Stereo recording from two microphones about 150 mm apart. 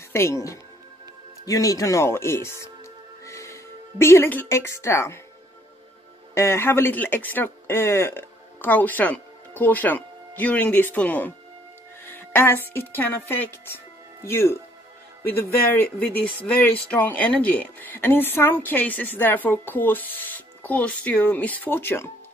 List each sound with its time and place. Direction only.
0.1 s speech: 15° left (ahead or behind)
6.3 s speech: 20° left (ahead or behind)